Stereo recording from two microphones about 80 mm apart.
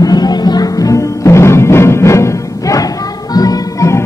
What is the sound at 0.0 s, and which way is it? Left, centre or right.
Music, left.